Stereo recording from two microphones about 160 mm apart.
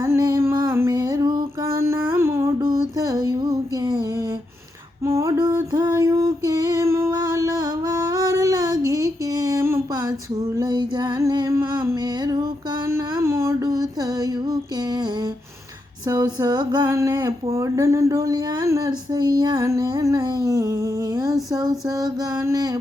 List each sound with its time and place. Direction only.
0.0 s music: 20° right (ahead or behind)
1.8 s music: 15° right (ahead or behind)
5.0 s female singing: 20° right (ahead or behind)
10.6 s music: 25° right (ahead or behind)
11.9 s a sound: 25° right (ahead or behind)
12.9 s female singing: 15° right (ahead or behind)
16.0 s a sound: 25° right (ahead or behind)
21.5 s female singing: 25° right (ahead or behind)